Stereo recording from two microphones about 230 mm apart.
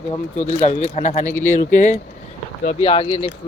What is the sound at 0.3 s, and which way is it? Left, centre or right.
Speech, left.